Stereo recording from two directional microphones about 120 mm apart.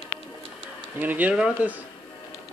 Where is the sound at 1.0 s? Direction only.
15° right (ahead or behind).